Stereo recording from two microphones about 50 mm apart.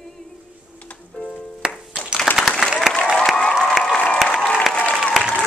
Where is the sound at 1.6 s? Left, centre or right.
Centre.